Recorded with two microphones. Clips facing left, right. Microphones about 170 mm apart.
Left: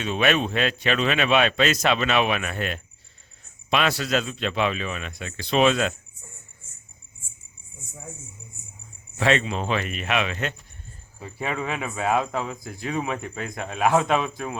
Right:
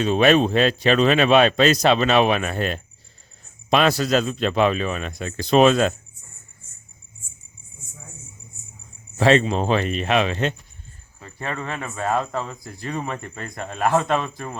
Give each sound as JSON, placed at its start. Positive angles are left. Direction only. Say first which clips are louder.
{"t": 0.0, "sound": "speech", "louder": "right 6 dB", "side_deg": -35}
{"t": 9.1, "sound": "speech", "louder": "right 5 dB", "side_deg": -35}
{"t": 11.2, "sound": "speech", "louder": "left 1 dB", "side_deg": 10}